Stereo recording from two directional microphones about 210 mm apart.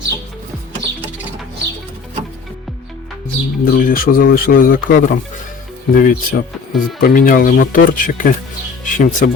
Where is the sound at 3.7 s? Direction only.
40° left (ahead or behind).